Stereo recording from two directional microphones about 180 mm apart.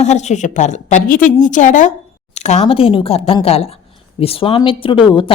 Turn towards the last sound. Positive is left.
turn(degrees=30)  # may be behind; listen again after turning